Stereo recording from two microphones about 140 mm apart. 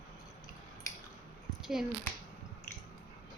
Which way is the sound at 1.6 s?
5° right (ahead or behind).